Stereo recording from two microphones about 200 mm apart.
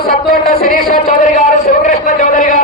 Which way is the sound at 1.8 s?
40° left (ahead or behind).